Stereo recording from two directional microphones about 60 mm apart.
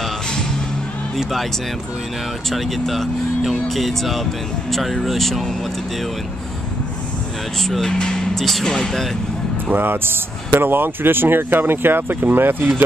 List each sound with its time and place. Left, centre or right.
1.1 s speech: centre
2.5 s speech: centre
7.6 s speech: centre
9.7 s speech: right